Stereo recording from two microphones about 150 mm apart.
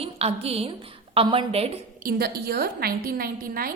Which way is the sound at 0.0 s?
40° right (ahead or behind).